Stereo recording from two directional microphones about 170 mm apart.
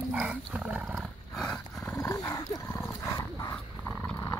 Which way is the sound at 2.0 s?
20° left (ahead or behind).